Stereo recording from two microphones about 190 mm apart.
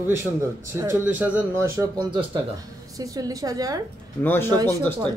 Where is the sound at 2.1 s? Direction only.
25° right (ahead or behind).